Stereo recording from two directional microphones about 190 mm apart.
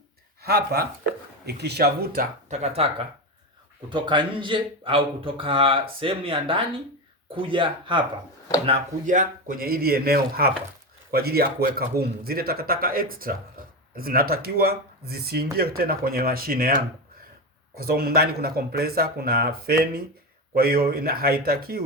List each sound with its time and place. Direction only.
0.4 s speech: 55° right (ahead or behind)
2.5 s speech: 35° right (ahead or behind)
8.6 s a man's voice: 35° right (ahead or behind); by 21.8 s 50° right (ahead or behind)